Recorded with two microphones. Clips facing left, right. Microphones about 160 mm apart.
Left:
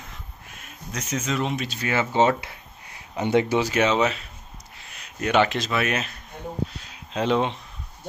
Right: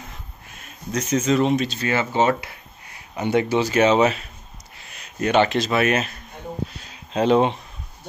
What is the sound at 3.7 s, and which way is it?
Speech, 40° right (ahead or behind).